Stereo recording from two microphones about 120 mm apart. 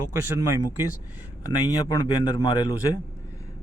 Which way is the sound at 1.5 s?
30° left (ahead or behind).